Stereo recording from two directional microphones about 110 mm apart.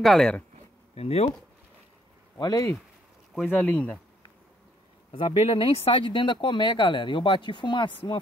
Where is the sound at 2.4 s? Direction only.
35° left (ahead or behind).